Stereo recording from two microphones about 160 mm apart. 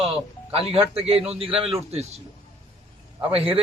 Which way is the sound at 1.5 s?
Centre (ahead or behind).